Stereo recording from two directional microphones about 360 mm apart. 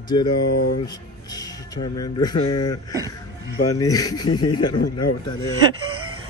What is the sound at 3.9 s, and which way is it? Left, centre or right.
Speech, left.